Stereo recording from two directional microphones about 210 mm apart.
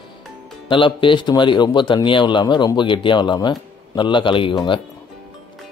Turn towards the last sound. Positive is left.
turn(degrees=25)  # may be behind; listen again after turning